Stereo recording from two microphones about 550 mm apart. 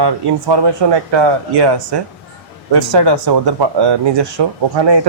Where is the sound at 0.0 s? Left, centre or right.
Right.